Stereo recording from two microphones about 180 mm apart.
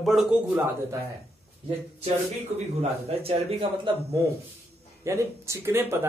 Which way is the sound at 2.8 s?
35° right (ahead or behind).